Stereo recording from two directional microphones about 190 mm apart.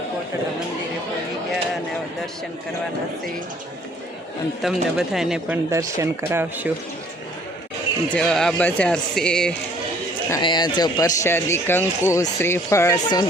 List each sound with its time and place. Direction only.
4.6 s speech: centre (ahead or behind)
5.7 s speech: 15° right (ahead or behind)
8.1 s speech: 5° left (ahead or behind)
10.2 s a man's voice: 20° left (ahead or behind)